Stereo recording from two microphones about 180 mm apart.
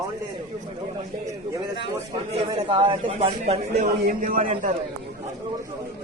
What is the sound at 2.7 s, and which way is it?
A man's voice, 30° right (ahead or behind).